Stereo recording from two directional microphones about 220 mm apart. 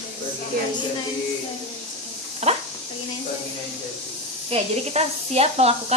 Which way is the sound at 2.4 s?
30° right (ahead or behind).